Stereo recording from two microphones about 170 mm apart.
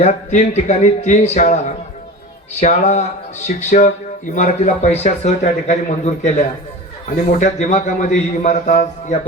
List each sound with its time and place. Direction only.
0.0 s speech: 40° left (ahead or behind)